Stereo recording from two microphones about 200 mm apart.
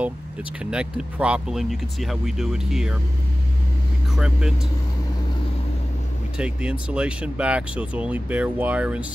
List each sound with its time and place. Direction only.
0.6 s speech: 5° right (ahead or behind)
4.1 s speech: 5° right (ahead or behind)
6.3 s speech: 5° right (ahead or behind)